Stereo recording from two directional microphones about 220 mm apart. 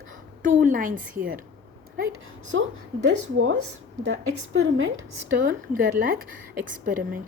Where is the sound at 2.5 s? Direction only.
60° right (ahead or behind).